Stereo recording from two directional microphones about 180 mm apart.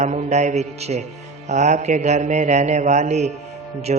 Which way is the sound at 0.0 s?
40° right (ahead or behind).